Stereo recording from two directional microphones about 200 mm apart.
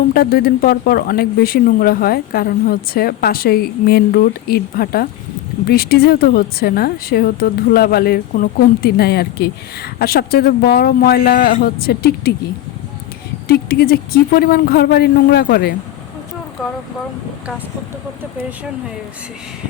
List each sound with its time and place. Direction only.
0.1 s a woman's voice: 50° left (ahead or behind)
13.5 s a woman's voice: 50° left (ahead or behind)